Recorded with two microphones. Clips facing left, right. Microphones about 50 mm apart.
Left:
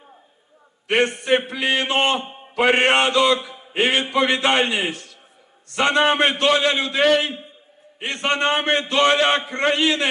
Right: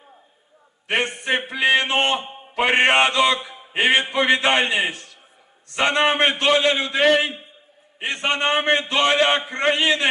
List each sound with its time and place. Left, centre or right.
0.9 s a sound: centre
2.1 s a man's voice: centre
2.6 s a man's voice: centre
3.7 s a sound: centre
4.0 s a man's voice: centre
4.9 s a man's voice: right